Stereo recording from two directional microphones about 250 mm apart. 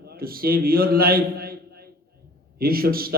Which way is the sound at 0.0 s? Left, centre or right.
Right.